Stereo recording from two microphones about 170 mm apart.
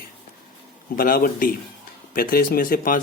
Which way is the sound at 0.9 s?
55° left (ahead or behind).